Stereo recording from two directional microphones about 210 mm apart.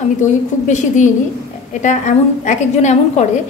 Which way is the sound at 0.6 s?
35° left (ahead or behind).